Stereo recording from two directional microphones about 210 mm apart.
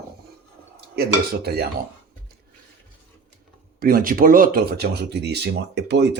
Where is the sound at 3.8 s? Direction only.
45° right (ahead or behind).